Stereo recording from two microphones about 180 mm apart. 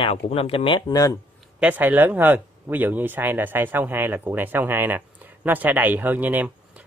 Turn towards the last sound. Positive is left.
turn(degrees=-10)  # may be behind; listen again after turning